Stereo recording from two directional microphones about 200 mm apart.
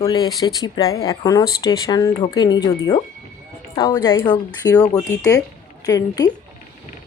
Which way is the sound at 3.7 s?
15° left (ahead or behind).